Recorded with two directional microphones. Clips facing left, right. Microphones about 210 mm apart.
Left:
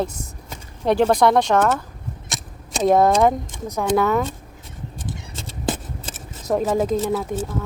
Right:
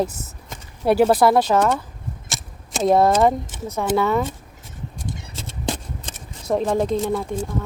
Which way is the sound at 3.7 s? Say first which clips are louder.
Left 1 dB; centre (ahead or behind).